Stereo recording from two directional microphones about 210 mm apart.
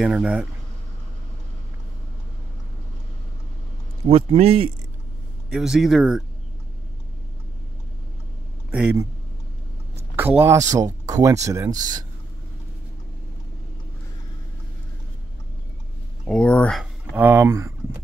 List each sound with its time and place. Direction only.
0.0 s speech: 5° right (ahead or behind)
4.0 s speech: 30° right (ahead or behind)
5.5 s speech: 5° right (ahead or behind)
8.7 s speech: 10° right (ahead or behind)
10.1 s speech: 10° right (ahead or behind)
16.3 s speech: 5° left (ahead or behind)
17.1 s speech: 10° right (ahead or behind)